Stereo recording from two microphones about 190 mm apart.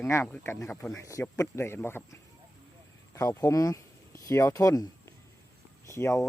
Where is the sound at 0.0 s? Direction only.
15° left (ahead or behind).